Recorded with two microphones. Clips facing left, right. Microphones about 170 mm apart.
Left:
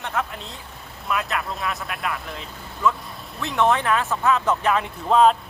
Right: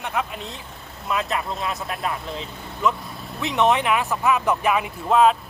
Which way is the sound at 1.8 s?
25° right (ahead or behind).